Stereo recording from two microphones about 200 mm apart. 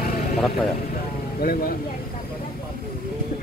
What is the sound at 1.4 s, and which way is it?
Speech, 45° left (ahead or behind).